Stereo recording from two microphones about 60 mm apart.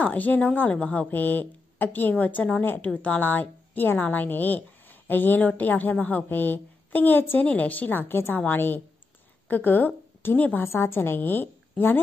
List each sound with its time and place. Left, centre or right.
0.0 s a woman's voice: left
2.9 s a woman's voice: left
10.6 s a woman's voice: left